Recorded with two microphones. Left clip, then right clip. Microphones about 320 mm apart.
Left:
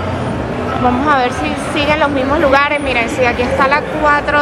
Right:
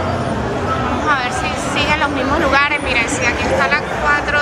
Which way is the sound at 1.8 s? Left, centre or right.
Centre.